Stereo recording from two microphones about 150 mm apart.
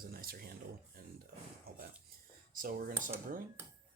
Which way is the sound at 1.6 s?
80° right.